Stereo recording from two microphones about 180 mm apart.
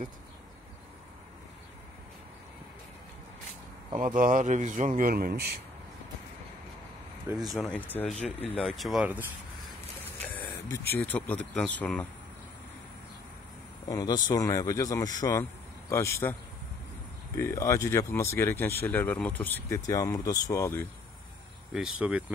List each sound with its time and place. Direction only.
4.0 s a man's voice: 50° right (ahead or behind)
7.3 s speech: centre (ahead or behind)
8.2 s speech: 35° left (ahead or behind)
8.5 s speech: centre (ahead or behind)
10.2 s vehicle: 10° left (ahead or behind)
11.0 s speech: 10° left (ahead or behind)
13.8 s speech: 20° left (ahead or behind)
17.4 s speech: 15° left (ahead or behind)
21.7 s speech: 5° right (ahead or behind)